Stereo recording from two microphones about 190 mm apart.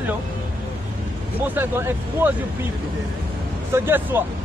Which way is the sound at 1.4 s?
10° right (ahead or behind).